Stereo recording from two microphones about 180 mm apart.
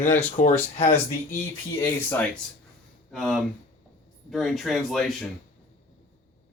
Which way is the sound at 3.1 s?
Centre (ahead or behind).